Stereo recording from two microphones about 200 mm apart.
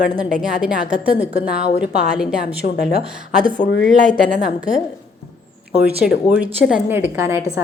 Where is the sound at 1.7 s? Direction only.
5° right (ahead or behind).